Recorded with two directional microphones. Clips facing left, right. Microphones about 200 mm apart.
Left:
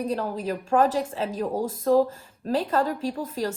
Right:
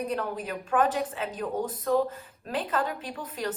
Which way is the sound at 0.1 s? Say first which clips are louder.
Left 4 dB; 30° left (ahead or behind).